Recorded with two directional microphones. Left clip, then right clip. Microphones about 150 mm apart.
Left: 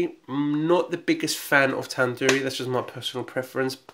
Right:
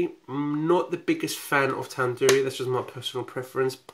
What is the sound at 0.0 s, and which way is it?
Speech, 15° left (ahead or behind).